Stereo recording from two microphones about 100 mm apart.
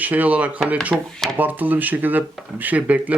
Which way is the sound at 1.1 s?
5° left (ahead or behind).